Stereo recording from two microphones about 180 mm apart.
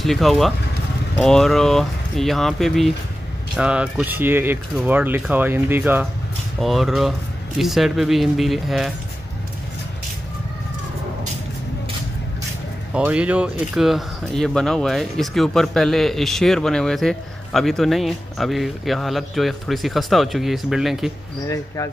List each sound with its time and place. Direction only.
0.0 s speech: centre (ahead or behind)
12.9 s speech: 5° right (ahead or behind)